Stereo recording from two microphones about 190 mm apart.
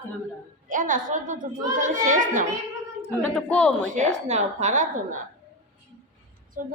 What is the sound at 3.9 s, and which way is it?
Speech, 40° right (ahead or behind).